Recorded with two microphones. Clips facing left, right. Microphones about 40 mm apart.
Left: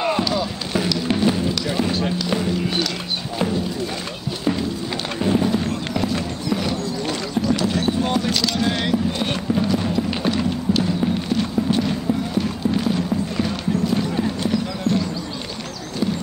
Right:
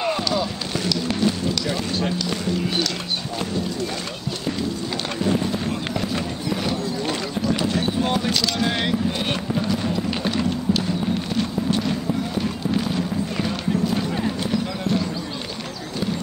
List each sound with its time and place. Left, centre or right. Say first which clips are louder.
0.0 s a sound: left 2 dB; centre
0.7 s music: left 3 dB; centre
1.5 s basketball bounce: left 3 dB; centre
2.2 s run: left 2 dB; centre
3.4 s a sound: left 6 dB; centre
4.5 s run: left 6 dB; centre
5.2 s clip-clop: left 4 dB; centre
7.6 s a sound: left 1 dB; centre
8.7 s music: left 1 dB; centre